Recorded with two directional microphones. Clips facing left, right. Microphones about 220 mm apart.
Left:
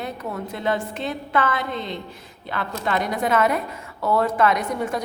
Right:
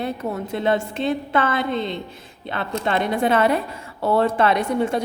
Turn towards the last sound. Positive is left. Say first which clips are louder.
# right 3 dB
turn(degrees=-30)  # may be behind; listen again after turning